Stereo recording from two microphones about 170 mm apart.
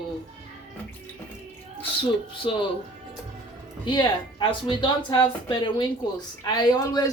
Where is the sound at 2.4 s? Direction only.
30° left (ahead or behind).